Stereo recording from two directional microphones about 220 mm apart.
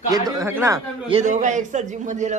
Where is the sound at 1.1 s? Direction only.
30° right (ahead or behind).